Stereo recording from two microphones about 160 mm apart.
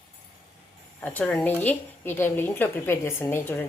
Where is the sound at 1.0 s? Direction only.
10° left (ahead or behind).